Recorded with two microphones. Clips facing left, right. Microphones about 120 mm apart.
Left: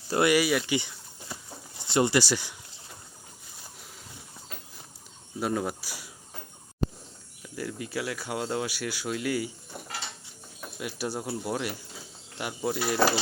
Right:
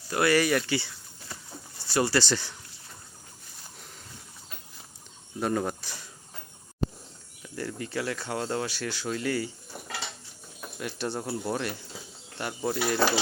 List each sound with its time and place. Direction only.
0.1 s speech: 20° left (ahead or behind)
0.8 s a sound: 20° left (ahead or behind)
1.9 s speech: 20° left (ahead or behind)
5.4 s speech: 5° left (ahead or behind)
7.4 s speech: 5° left (ahead or behind)
10.8 s speech: 10° left (ahead or behind)